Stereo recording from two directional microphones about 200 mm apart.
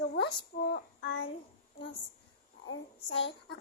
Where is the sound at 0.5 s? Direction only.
45° left (ahead or behind).